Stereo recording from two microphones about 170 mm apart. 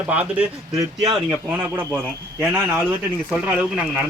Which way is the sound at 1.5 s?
10° right (ahead or behind).